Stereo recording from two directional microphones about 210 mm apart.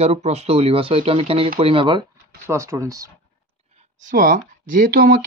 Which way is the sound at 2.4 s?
15° right (ahead or behind).